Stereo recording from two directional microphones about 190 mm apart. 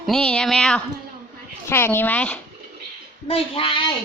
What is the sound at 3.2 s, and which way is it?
Speech, 30° left (ahead or behind).